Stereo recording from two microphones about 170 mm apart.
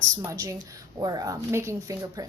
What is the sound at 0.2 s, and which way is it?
A woman's voice, 20° right (ahead or behind).